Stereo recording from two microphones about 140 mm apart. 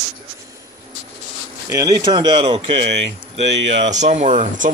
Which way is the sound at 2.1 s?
40° right (ahead or behind).